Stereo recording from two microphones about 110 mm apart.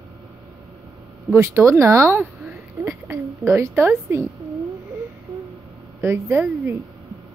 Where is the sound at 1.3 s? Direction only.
25° right (ahead or behind).